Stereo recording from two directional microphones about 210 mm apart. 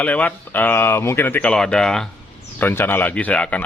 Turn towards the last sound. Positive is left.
turn(degrees=5)  # may be behind; listen again after turning